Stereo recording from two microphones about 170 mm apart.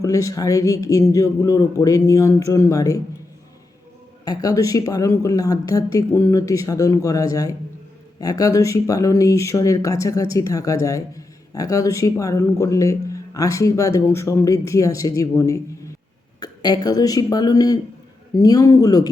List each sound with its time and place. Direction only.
0.0 s speech: 20° left (ahead or behind)
4.3 s speech: 20° left (ahead or behind)